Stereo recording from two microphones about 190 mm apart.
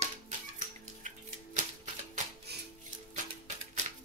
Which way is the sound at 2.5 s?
60° right (ahead or behind).